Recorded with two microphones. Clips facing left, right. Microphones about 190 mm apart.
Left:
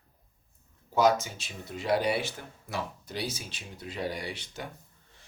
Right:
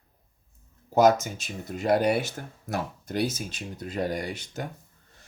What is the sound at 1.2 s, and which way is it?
Speech, 45° right (ahead or behind).